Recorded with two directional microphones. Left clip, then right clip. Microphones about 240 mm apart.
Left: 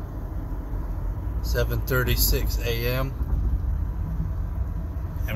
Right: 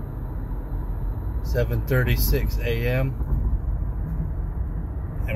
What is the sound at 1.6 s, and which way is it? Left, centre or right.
Speech, left.